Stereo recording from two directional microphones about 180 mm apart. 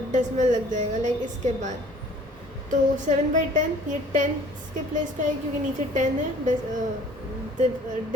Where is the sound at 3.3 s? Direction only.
45° right (ahead or behind).